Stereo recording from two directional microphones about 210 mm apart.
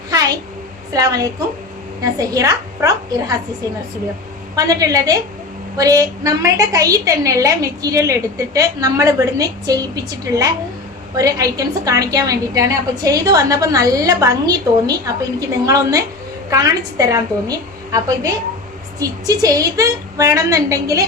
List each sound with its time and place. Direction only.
0.1 s a sound: 15° right (ahead or behind)
0.9 s a woman's voice: 15° right (ahead or behind)
4.5 s a woman's voice: 15° right (ahead or behind)